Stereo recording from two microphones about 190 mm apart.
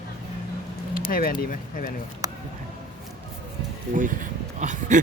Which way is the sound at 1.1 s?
50° left (ahead or behind).